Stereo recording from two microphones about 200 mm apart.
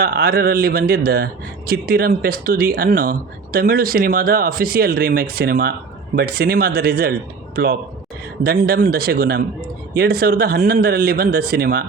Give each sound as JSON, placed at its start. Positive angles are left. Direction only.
{"t": 0.0, "sound": "a man's voice", "side_deg": -50}